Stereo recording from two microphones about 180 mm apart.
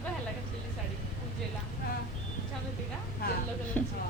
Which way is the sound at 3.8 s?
10° left (ahead or behind).